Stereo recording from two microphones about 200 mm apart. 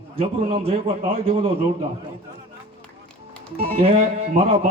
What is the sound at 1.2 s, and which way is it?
Music, 30° right (ahead or behind).